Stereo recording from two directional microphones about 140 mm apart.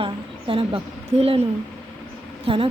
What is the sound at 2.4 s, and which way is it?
Speech, 40° right (ahead or behind).